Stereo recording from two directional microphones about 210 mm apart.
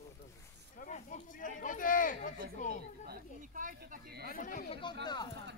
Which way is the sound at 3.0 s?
45° right (ahead or behind).